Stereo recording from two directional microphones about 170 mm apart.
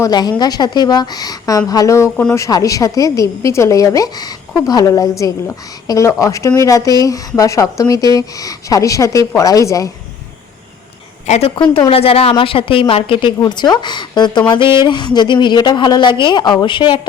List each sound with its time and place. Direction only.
0.0 s a woman's voice: 25° left (ahead or behind)
11.3 s a woman's voice: 35° left (ahead or behind)